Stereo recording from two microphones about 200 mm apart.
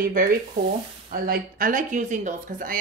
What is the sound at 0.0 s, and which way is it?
Speech, 45° right (ahead or behind).